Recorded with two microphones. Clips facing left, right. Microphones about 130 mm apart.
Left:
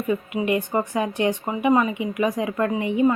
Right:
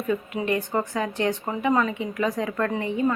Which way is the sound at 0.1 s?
15° left (ahead or behind).